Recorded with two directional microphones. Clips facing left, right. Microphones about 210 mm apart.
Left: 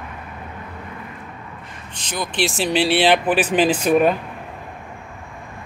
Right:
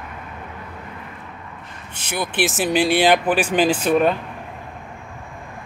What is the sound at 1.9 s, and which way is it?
Speech, 10° right (ahead or behind).